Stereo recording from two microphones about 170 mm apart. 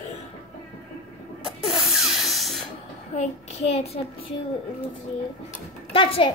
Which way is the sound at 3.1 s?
35° left (ahead or behind).